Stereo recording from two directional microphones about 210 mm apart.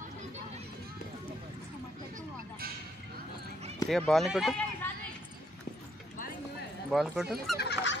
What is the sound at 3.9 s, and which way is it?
Speech, centre (ahead or behind).